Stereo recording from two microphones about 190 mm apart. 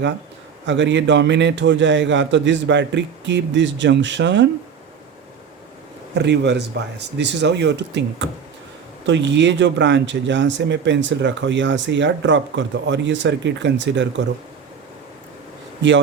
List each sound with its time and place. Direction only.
0.7 s speech: 70° right (ahead or behind)
6.1 s speech: 65° right (ahead or behind)